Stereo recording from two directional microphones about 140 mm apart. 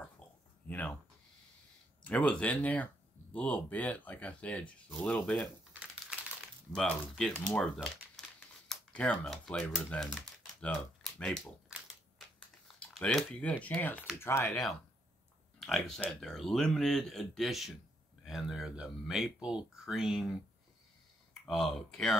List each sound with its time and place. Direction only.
0.2 s oink: 10° left (ahead or behind)
0.7 s speech: 10° left (ahead or behind)
2.0 s speech: 10° left (ahead or behind)
6.7 s speech: 5° left (ahead or behind)
8.2 s crumpling: 5° left (ahead or behind)
8.6 s speech: 10° left (ahead or behind)
10.1 s typing: centre (ahead or behind)
12.7 s speech: 10° left (ahead or behind)
15.6 s speech: 5° left (ahead or behind)